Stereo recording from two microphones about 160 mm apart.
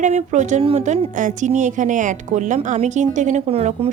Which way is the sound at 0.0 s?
45° right (ahead or behind).